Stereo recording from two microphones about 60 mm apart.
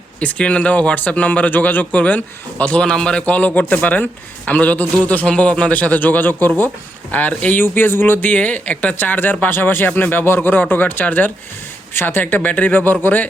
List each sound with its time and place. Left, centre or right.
0.2 s speech: left
5.2 s speech: centre; by 8.4 s left
8.4 s speech: left